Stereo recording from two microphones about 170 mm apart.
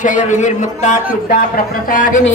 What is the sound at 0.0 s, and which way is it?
A man's voice, 45° left (ahead or behind).